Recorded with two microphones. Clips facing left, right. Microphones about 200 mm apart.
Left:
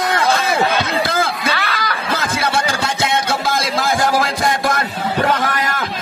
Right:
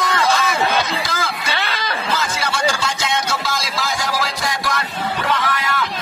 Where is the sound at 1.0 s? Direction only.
55° left (ahead or behind).